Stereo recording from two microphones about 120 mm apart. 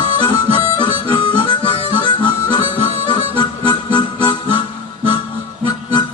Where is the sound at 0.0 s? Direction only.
40° left (ahead or behind).